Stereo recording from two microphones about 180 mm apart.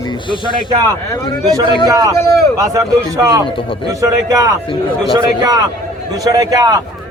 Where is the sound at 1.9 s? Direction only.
20° right (ahead or behind).